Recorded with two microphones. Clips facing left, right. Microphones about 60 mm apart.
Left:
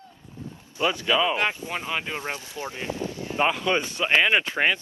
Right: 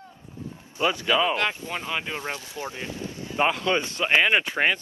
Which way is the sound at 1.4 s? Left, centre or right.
Left.